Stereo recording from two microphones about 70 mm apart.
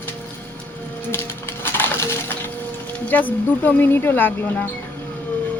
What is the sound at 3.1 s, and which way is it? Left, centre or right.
Speech, left.